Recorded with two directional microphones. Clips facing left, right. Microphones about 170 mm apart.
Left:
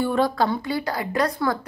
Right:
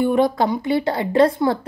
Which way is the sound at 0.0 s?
20° right (ahead or behind).